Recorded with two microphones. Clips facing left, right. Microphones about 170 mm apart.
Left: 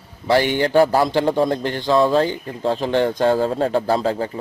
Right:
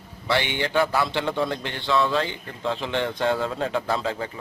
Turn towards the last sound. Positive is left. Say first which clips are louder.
# left 7 dB
turn(degrees=35)  # may be behind; listen again after turning